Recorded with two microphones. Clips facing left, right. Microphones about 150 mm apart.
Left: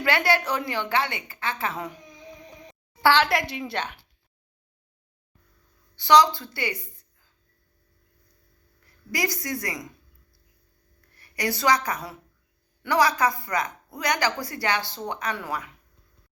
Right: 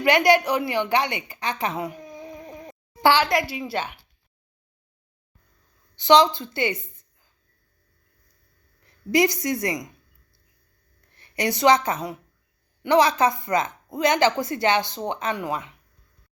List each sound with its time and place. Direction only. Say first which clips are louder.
0.0 s a woman's voice: right 6 dB; 15° right (ahead or behind)
3.2 s a woman's voice: right 1 dB; centre (ahead or behind)
6.0 s a woman's voice: right 2 dB; 20° right (ahead or behind)
8.8 s a woman's voice: right 9 dB; 20° right (ahead or behind)
11.1 s a woman's voice: right 3 dB; 25° right (ahead or behind)